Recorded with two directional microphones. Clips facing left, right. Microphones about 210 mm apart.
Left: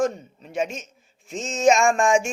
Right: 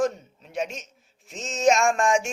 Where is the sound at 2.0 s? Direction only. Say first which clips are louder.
Left 3 dB; 50° left (ahead or behind).